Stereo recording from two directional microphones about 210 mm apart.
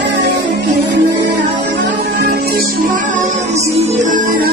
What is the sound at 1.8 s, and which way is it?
Music, 50° right (ahead or behind).